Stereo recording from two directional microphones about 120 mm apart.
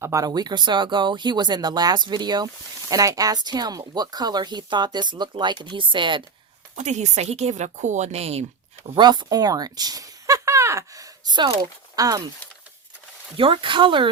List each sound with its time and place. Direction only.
0.0 s speech: 25° right (ahead or behind); by 6.2 s 40° right (ahead or behind)
6.7 s speech: 75° right (ahead or behind); by 8.4 s 60° right (ahead or behind)
9.0 s speech: 35° right (ahead or behind)
13.3 s speech: 45° right (ahead or behind)